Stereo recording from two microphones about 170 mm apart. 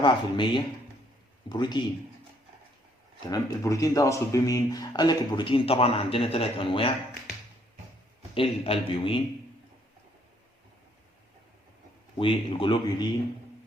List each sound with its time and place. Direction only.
0.0 s speech: 25° left (ahead or behind)
3.2 s speech: 20° left (ahead or behind)
8.4 s a man's voice: 35° left (ahead or behind)
12.2 s a man's voice: 30° left (ahead or behind)